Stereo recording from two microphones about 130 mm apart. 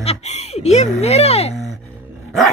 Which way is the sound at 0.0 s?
55° left (ahead or behind).